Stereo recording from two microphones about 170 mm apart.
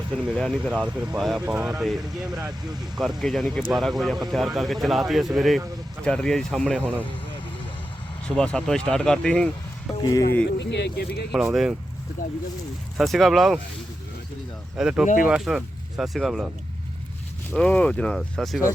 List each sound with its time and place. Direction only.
0.3 s speech: centre (ahead or behind)
8.4 s speech: 5° left (ahead or behind)
10.0 s speech: 20° left (ahead or behind)
10.6 s speech: 90° left; by 11.3 s 70° left (ahead or behind)
11.5 s speech: 5° right (ahead or behind)
13.0 s speech: centre (ahead or behind)
14.8 s speech: 5° right (ahead or behind)
15.0 s speech: 50° left (ahead or behind)
15.3 s speech: 5° right (ahead or behind)
17.5 s speech: 5° left (ahead or behind)